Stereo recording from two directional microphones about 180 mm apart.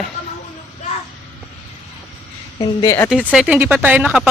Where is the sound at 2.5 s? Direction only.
20° left (ahead or behind).